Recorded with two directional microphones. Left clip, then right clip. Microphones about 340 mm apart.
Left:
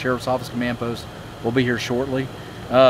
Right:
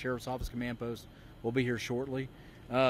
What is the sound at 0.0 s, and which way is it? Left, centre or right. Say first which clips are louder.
Speech: left 14 dB; right.